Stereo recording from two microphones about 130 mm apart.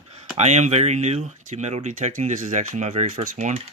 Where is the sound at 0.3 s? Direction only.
60° right (ahead or behind).